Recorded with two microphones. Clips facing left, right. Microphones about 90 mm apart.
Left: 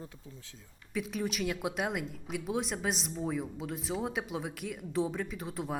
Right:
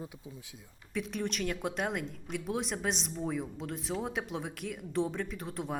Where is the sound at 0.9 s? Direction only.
Centre (ahead or behind).